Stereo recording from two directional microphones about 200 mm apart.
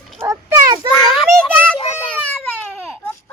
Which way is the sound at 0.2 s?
15° right (ahead or behind).